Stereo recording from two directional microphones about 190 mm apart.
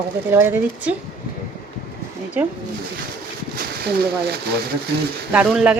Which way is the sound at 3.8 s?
60° right (ahead or behind).